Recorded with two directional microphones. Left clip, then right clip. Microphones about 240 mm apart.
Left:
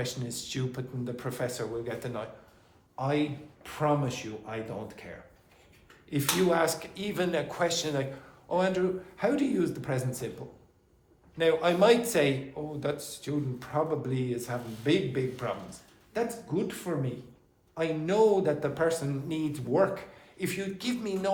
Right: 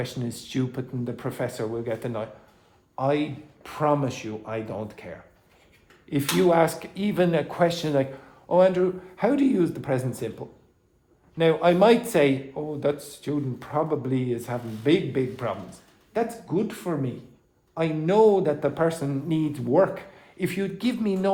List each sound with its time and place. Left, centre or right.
0.0 s speech: right
6.1 s speech: right
11.3 s speech: right